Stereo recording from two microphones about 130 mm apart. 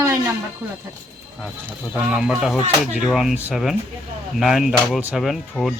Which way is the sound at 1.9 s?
5° right (ahead or behind).